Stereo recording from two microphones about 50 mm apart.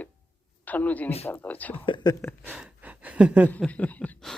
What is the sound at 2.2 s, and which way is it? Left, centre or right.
Speech, left.